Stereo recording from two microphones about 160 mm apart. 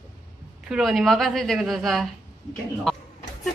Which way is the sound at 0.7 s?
Centre (ahead or behind).